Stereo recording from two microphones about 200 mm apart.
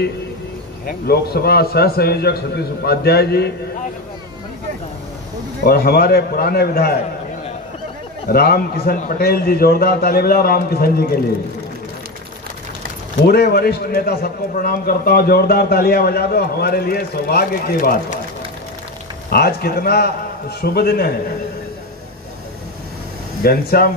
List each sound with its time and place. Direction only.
0.8 s a man's voice: 50° left (ahead or behind)
5.7 s a man's voice: 50° left (ahead or behind)
8.3 s a man's voice: 50° left (ahead or behind)
13.2 s a man's voice: 50° left (ahead or behind)
19.3 s a man's voice: 50° left (ahead or behind)
23.4 s a man's voice: 50° left (ahead or behind)